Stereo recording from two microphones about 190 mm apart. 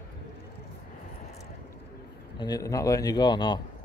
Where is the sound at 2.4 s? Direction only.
20° left (ahead or behind).